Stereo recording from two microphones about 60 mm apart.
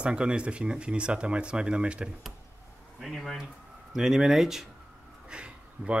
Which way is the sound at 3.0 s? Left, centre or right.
Centre.